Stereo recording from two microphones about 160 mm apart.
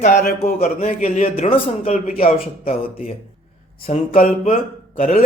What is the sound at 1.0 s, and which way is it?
Speech, 45° left (ahead or behind).